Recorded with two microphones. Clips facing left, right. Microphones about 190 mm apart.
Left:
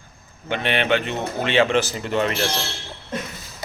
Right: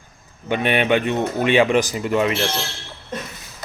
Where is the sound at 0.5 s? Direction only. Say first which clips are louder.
Right 3 dB; 15° right (ahead or behind).